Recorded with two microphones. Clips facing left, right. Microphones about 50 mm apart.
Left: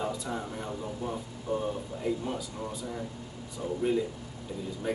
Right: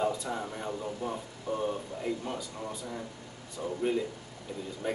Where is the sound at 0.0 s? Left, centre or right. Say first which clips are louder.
Right 2 dB; centre.